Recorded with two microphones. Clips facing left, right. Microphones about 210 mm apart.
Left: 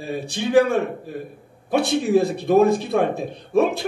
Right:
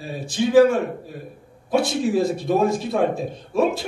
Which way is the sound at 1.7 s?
60° left (ahead or behind).